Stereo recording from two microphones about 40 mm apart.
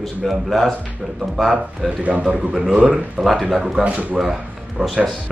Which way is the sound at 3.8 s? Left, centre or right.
Right.